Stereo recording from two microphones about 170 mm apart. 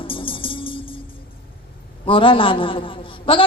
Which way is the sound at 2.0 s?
30° left (ahead or behind).